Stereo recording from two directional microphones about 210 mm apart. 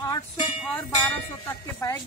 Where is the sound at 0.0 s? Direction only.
15° left (ahead or behind).